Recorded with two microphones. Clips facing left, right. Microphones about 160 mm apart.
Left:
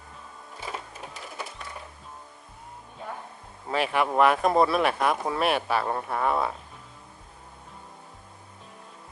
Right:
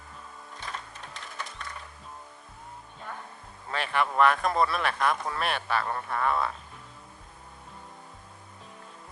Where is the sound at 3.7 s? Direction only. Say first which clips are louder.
Left 4 dB; 5° left (ahead or behind).